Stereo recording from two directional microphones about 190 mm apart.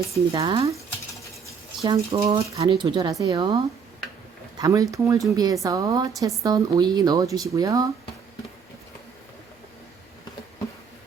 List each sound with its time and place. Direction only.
0.3 s a woman's voice: 25° right (ahead or behind)
1.8 s a woman's voice: 25° right (ahead or behind)